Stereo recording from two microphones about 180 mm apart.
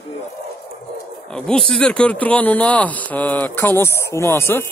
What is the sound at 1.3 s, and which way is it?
Speech, 5° left (ahead or behind).